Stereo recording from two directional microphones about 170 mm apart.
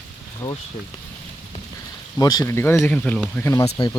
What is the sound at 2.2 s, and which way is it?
Speech, 20° left (ahead or behind).